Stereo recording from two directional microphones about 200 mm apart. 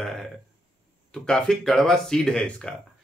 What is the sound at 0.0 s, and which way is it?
Burping, centre (ahead or behind).